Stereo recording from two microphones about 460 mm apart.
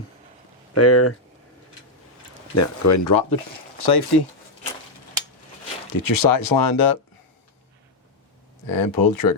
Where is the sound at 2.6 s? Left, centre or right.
Left.